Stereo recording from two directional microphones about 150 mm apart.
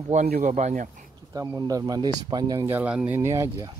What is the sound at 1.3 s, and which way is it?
Speech, 25° right (ahead or behind).